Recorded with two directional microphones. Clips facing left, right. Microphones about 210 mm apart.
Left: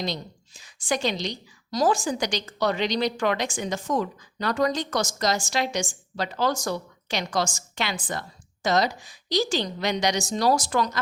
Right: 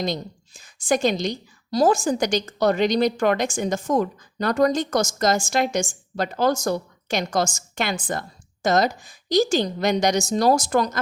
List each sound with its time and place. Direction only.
0.0 s a woman's voice: 50° right (ahead or behind)